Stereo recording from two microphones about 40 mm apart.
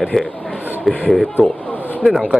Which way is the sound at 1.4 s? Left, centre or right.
Left.